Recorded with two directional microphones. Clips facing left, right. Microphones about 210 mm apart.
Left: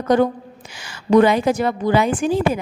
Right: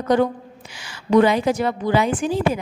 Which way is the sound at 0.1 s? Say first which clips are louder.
Left 1 dB; 45° left (ahead or behind).